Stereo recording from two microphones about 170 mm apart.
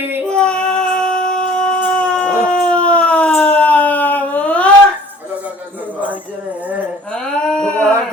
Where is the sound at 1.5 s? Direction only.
5° left (ahead or behind).